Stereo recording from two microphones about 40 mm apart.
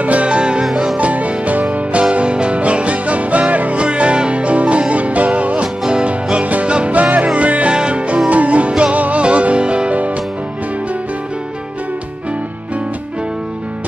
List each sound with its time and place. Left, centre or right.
0.0 s music: right
0.3 s music: right
0.9 s music: right
5.9 s music: right